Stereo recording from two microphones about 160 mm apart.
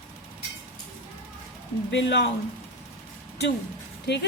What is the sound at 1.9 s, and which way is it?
Speech, 90° left.